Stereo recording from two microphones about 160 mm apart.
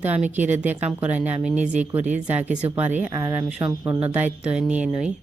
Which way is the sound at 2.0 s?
45° right (ahead or behind).